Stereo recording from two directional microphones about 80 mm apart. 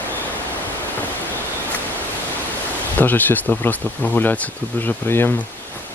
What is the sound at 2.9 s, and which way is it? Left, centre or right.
Speech, left.